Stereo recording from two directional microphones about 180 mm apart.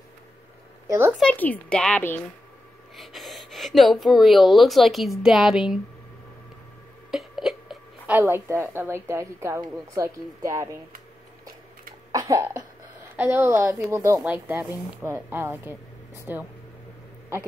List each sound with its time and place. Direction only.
0.8 s a woman's voice: 15° right (ahead or behind)
1.1 s speech: 5° left (ahead or behind)
7.1 s a woman's voice: centre (ahead or behind); by 10.8 s 15° right (ahead or behind)
12.1 s cough: 20° right (ahead or behind)
13.1 s a woman's voice: 10° right (ahead or behind)